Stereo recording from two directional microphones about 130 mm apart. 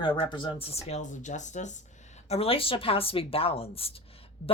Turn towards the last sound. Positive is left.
turn(degrees=45)  # may be behind; listen again after turning